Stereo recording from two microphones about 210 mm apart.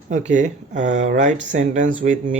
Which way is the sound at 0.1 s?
35° right (ahead or behind).